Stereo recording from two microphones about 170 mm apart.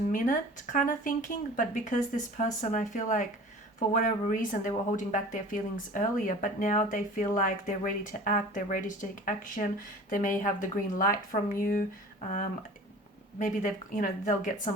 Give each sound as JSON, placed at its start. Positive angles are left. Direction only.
{"t": 0.1, "sound": "speech", "side_deg": 50}
{"t": 13.4, "sound": "speech", "side_deg": 50}